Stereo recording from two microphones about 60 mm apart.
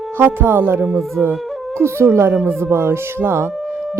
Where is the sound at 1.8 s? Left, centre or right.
Right.